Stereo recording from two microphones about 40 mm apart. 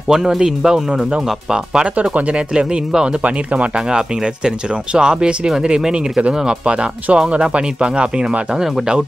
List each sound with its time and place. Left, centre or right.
0.1 s speech: centre
2.0 s speech: right
2.5 s speech: centre
4.9 s speech: centre